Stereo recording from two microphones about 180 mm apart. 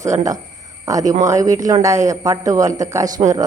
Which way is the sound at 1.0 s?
45° right (ahead or behind).